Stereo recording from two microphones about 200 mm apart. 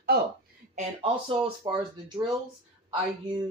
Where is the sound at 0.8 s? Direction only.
25° right (ahead or behind).